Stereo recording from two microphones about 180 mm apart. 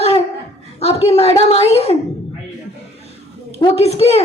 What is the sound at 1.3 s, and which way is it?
Speech, 35° left (ahead or behind).